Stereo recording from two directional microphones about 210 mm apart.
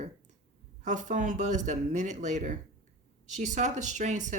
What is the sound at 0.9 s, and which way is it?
Speech, 35° right (ahead or behind).